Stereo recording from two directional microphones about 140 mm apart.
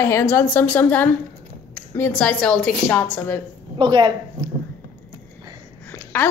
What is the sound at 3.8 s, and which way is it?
Speech, 35° right (ahead or behind).